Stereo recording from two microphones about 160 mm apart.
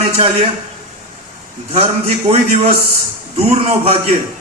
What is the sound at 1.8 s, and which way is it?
A man's voice, 40° right (ahead or behind).